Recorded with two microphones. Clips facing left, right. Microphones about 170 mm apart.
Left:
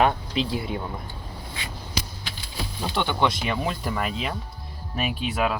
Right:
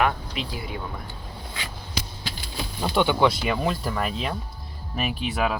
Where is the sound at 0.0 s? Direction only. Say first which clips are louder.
Left 3 dB; 30° left (ahead or behind).